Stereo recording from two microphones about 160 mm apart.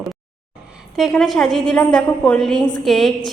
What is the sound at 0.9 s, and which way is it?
A woman's voice, centre (ahead or behind).